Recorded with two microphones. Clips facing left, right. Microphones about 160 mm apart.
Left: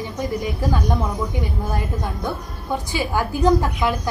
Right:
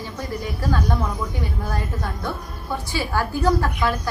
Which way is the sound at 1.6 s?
15° left (ahead or behind).